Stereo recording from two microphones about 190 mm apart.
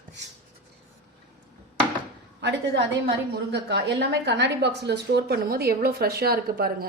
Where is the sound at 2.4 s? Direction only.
60° right (ahead or behind).